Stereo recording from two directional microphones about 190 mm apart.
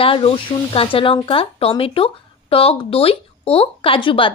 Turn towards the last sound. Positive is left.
turn(degrees=25)  # may be behind; listen again after turning